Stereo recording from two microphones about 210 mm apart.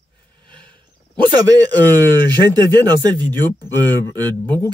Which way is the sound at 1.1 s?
15° right (ahead or behind).